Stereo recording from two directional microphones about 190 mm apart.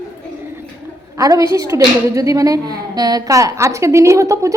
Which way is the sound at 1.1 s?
15° right (ahead or behind).